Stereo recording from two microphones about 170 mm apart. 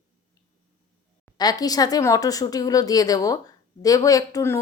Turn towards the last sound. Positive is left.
turn(degrees=20)  # may be behind; listen again after turning